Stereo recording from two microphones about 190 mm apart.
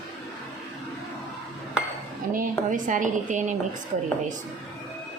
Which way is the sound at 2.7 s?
40° right (ahead or behind).